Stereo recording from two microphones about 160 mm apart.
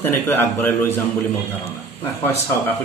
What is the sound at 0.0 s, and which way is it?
A man's voice, 15° left (ahead or behind).